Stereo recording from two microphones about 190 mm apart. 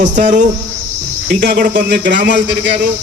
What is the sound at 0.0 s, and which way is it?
Speech, 40° right (ahead or behind).